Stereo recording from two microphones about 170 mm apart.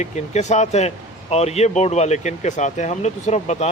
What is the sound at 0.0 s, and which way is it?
Speech, 40° left (ahead or behind).